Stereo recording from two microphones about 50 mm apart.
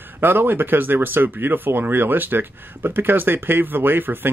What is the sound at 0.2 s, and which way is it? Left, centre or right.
Speech, right.